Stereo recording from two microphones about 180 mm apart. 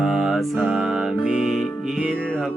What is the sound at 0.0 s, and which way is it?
Music, centre (ahead or behind).